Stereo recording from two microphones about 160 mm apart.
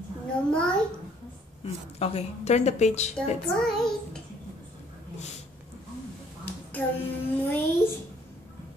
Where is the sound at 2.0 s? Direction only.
40° left (ahead or behind).